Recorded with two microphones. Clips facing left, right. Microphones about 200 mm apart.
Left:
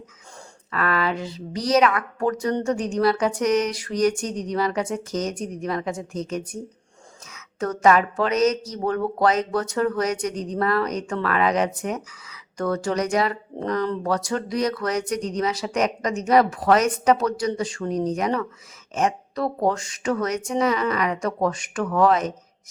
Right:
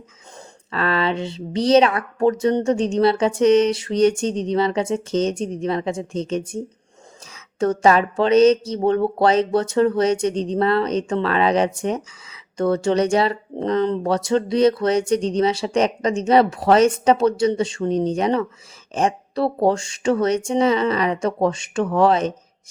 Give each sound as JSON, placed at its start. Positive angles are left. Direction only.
{"t": 0.7, "sound": "speech", "side_deg": -25}